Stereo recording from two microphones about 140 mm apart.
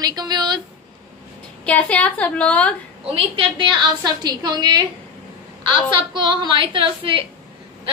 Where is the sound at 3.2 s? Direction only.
35° right (ahead or behind).